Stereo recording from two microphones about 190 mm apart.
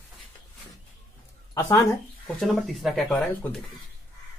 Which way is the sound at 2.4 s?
Centre (ahead or behind).